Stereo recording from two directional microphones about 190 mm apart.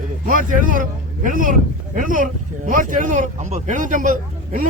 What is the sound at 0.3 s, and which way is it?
A man's voice, 45° right (ahead or behind).